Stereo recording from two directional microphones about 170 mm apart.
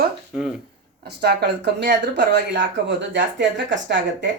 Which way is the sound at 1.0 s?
70° right (ahead or behind).